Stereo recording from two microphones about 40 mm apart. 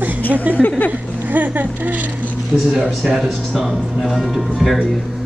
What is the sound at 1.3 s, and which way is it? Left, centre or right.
Speech, right.